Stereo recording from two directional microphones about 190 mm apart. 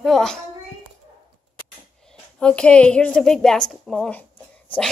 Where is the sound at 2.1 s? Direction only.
5° left (ahead or behind).